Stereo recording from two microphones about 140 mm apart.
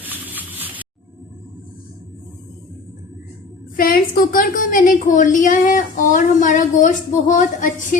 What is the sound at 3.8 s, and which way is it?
A woman's voice, 90° left.